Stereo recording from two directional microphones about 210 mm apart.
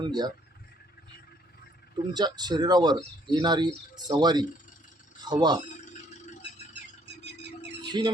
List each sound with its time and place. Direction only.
0.0 s speech: 20° right (ahead or behind)
2.1 s speech: 20° right (ahead or behind)
7.9 s speech: 20° right (ahead or behind)